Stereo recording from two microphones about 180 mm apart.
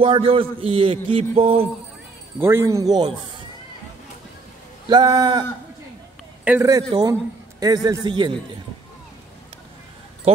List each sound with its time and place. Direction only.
0.0 s a sound: 30° right (ahead or behind)
2.3 s speech: 15° right (ahead or behind)
4.8 s a man's voice: 25° right (ahead or behind)
6.4 s speech: 10° right (ahead or behind)
6.7 s a man's voice: 20° right (ahead or behind)